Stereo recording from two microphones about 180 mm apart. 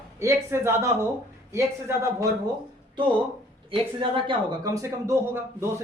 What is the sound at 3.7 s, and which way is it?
A man's voice, 30° right (ahead or behind).